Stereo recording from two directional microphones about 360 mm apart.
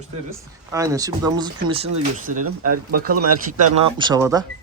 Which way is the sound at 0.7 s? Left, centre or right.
Centre.